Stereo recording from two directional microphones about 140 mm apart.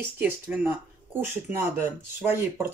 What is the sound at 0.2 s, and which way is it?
Speech, 10° right (ahead or behind).